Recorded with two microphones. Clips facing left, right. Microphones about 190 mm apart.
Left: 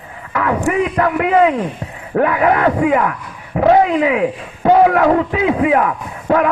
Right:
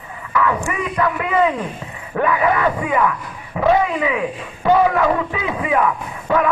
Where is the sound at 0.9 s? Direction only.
55° left (ahead or behind).